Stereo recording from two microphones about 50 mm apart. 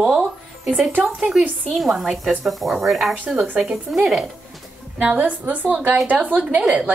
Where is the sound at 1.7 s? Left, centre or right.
Centre.